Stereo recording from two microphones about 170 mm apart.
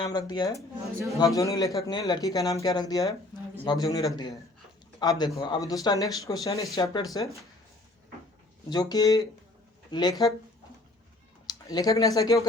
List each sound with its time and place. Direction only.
0.0 s speech: 25° left (ahead or behind)
8.7 s speech: 20° left (ahead or behind)
11.4 s speech: 25° left (ahead or behind)